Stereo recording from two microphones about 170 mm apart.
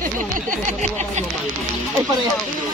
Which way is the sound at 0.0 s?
50° right (ahead or behind).